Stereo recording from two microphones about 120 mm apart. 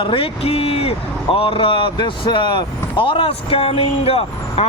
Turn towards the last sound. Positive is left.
turn(degrees=55)  # may be behind; listen again after turning